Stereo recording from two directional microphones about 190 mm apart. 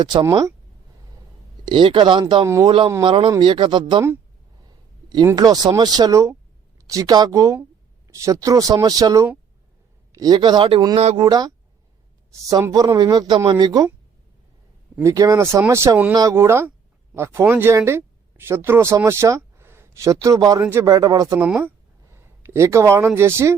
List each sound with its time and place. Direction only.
0.0 s speech: 25° right (ahead or behind)
1.6 s speech: 25° right (ahead or behind)
10.9 s speech: 35° right (ahead or behind)
11.2 s speech: 20° right (ahead or behind)
14.9 s speech: 15° right (ahead or behind)
21.4 s speech: 5° right (ahead or behind)